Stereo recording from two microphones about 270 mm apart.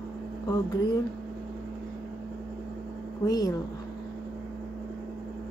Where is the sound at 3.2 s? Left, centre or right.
Centre.